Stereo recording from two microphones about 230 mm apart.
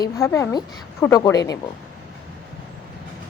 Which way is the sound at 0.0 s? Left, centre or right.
Centre.